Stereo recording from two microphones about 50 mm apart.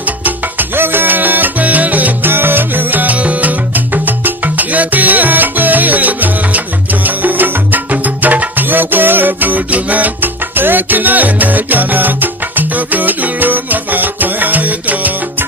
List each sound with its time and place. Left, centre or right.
0.8 s salsa music: right
2.3 s music: right